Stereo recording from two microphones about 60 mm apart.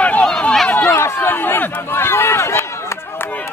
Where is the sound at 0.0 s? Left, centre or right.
Centre.